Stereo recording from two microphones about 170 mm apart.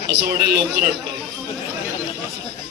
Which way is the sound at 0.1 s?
70° right (ahead or behind).